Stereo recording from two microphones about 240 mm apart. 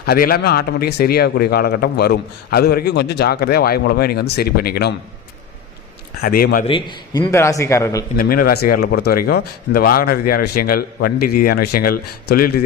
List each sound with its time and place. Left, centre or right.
0.0 s speech: left
6.2 s speech: left
6.7 s a man's voice: centre
8.2 s speech: left